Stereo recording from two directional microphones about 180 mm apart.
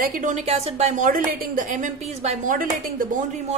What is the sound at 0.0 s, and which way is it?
A woman's voice, 45° right (ahead or behind).